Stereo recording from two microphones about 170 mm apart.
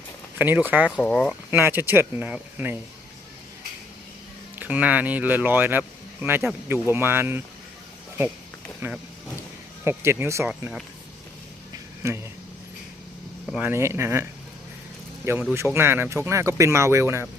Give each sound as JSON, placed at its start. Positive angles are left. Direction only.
{"t": 0.3, "sound": "speech", "side_deg": -10}
{"t": 0.9, "sound": "speech", "side_deg": 5}
{"t": 1.5, "sound": "speech", "side_deg": -15}
{"t": 4.6, "sound": "speech", "side_deg": -10}
{"t": 8.8, "sound": "speech", "side_deg": -15}
{"t": 12.0, "sound": "speech", "side_deg": -15}
{"t": 13.5, "sound": "speech", "side_deg": -10}